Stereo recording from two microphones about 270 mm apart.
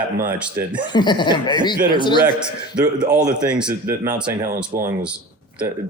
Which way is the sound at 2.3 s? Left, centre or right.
Centre.